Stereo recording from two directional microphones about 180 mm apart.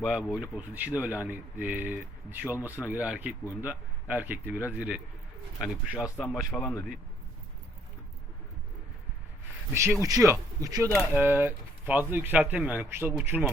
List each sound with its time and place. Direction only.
0.0 s speech: centre (ahead or behind)
6.5 s speech: 5° left (ahead or behind)
9.7 s speech: 15° right (ahead or behind)
10.9 s speech: 10° right (ahead or behind)